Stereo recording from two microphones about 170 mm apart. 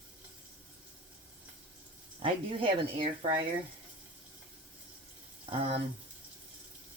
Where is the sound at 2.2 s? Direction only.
30° right (ahead or behind).